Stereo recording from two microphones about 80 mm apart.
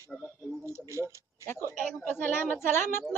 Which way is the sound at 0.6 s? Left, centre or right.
Right.